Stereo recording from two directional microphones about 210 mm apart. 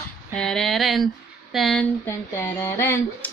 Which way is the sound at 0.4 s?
Centre (ahead or behind).